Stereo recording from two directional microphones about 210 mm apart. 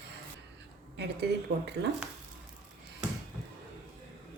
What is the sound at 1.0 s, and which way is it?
Speech, 55° right (ahead or behind).